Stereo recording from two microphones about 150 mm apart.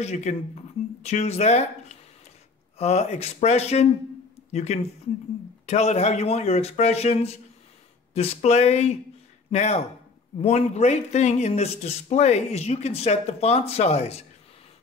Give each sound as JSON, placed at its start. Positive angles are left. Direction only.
{"t": 0.0, "sound": "speech", "side_deg": 50}